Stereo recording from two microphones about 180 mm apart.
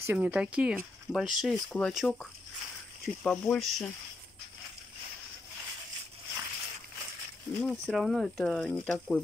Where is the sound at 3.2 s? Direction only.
5° left (ahead or behind).